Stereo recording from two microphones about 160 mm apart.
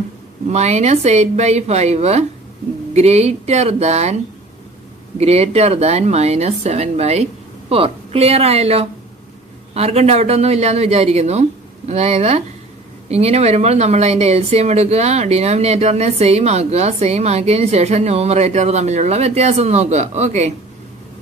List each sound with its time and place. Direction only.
0.5 s speech: 45° right (ahead or behind)
5.2 s speech: 40° right (ahead or behind)